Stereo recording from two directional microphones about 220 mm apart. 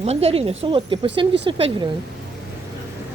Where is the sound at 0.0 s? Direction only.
30° right (ahead or behind).